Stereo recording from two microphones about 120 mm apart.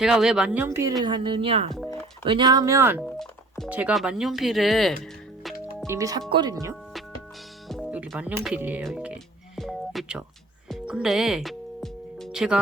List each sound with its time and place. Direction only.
0.0 s speech: 5° right (ahead or behind); by 0.9 s 25° right (ahead or behind)
1.0 s a woman's voice: 40° right (ahead or behind)
2.2 s speech: 40° right (ahead or behind); by 3.0 s 20° right (ahead or behind)
3.7 s speech: 10° right (ahead or behind)
5.8 s speech: 25° right (ahead or behind)
7.9 s music: 10° right (ahead or behind)
8.2 s speech: 10° right (ahead or behind)
9.6 s music: centre (ahead or behind)